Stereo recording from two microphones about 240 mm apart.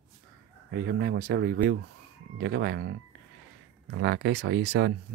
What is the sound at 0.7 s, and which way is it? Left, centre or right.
Speech, right.